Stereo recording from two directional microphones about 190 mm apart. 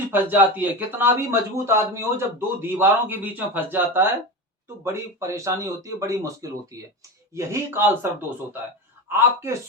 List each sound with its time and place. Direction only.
0.1 s speech: 10° right (ahead or behind)
9.0 s speech: 15° right (ahead or behind)